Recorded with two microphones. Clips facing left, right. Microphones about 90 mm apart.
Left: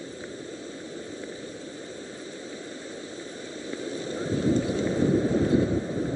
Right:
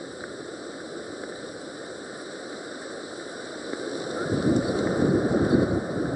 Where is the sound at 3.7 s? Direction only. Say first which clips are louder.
Right 2 dB; 15° right (ahead or behind).